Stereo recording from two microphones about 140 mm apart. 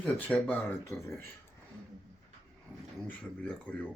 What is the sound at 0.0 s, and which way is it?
Speech, 10° left (ahead or behind).